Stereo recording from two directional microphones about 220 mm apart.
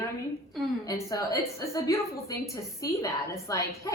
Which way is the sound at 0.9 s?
15° left (ahead or behind).